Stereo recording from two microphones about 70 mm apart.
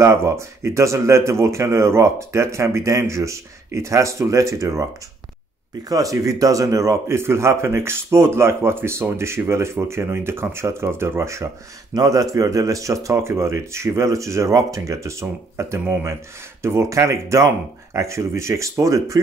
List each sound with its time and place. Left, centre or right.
0.0 s speech: right
5.9 s speech: right
11.9 s a man's voice: right